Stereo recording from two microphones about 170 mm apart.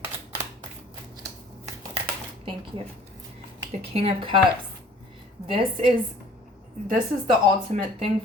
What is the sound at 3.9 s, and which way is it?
Speech, 35° right (ahead or behind).